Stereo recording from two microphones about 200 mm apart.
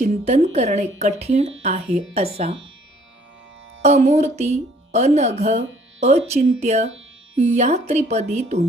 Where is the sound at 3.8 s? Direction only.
35° right (ahead or behind).